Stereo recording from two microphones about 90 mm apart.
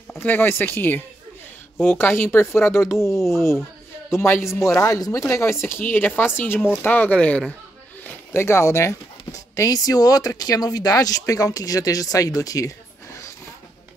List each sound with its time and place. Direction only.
0.2 s speech: 20° left (ahead or behind)
8.0 s speech: 25° left (ahead or behind)